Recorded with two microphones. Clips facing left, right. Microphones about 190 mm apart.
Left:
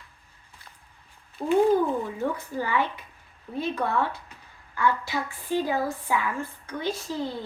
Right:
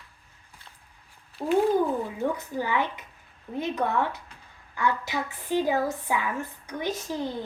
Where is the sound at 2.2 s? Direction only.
15° right (ahead or behind).